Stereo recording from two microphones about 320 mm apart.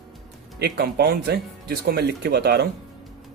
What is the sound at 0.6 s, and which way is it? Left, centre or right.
Speech, right.